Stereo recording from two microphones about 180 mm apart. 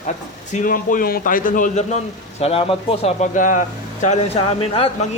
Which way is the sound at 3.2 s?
45° left (ahead or behind).